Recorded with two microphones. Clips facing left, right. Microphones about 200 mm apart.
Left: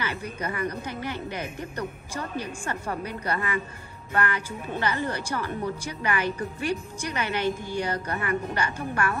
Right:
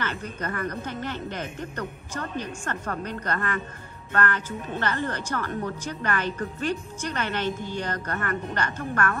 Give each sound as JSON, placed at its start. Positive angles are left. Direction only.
{"t": 0.0, "sound": "a woman's voice", "side_deg": 10}